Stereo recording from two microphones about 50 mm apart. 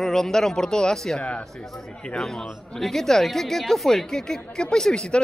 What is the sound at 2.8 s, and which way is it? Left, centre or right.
Speech, centre.